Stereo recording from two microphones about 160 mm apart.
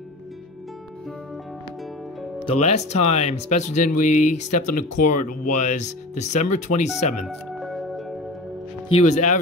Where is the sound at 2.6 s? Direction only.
45° left (ahead or behind).